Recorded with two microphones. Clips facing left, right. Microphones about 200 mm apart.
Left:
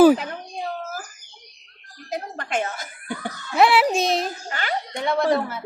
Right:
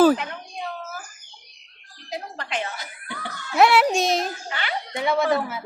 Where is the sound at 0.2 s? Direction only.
35° left (ahead or behind).